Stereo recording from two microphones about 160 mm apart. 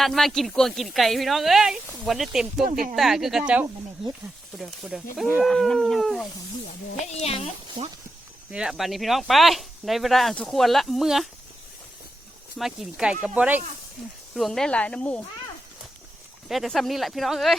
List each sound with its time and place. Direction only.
0.0 s speech: centre (ahead or behind)
7.0 s speech: 40° left (ahead or behind)
8.4 s speech: 5° right (ahead or behind)
12.5 s speech: centre (ahead or behind)
16.5 s speech: centre (ahead or behind)